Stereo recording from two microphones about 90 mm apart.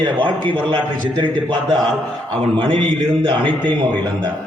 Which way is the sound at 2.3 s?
70° right (ahead or behind).